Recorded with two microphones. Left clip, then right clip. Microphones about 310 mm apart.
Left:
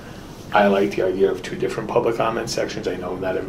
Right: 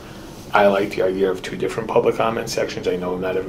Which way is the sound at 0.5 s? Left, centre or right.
Right.